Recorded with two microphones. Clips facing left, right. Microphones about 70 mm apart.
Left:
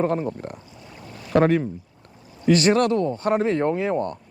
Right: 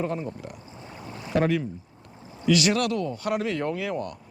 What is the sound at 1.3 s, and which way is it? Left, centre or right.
Speech, left.